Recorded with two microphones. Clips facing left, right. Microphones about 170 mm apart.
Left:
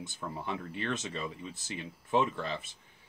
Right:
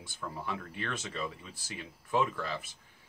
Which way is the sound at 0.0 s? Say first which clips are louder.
Left 1 dB; 20° left (ahead or behind).